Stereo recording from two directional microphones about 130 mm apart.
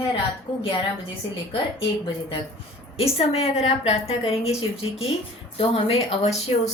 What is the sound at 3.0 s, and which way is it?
A woman's voice, 50° left (ahead or behind).